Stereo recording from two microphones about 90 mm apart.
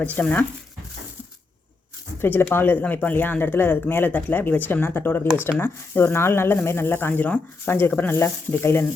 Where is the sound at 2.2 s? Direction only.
25° left (ahead or behind).